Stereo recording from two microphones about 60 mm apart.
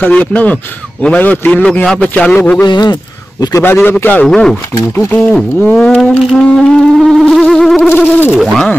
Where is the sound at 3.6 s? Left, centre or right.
Left.